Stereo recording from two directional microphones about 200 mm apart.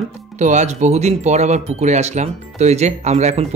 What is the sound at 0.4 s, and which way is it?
Speech, 35° right (ahead or behind).